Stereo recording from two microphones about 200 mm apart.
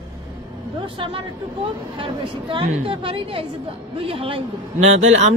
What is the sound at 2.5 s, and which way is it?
A woman's voice, 25° right (ahead or behind).